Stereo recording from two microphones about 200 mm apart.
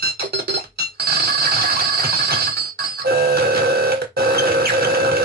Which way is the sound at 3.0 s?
50° right (ahead or behind).